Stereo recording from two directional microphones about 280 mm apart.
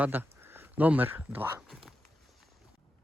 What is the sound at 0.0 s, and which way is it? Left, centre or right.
Speech, centre.